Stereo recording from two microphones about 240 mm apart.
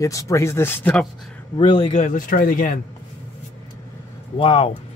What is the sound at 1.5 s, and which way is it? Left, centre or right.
Speech, left.